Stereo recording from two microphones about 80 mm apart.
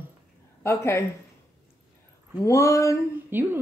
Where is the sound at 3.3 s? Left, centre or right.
Right.